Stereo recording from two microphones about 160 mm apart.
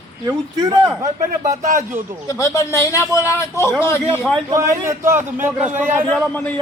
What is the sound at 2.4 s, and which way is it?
A man's voice, 20° left (ahead or behind).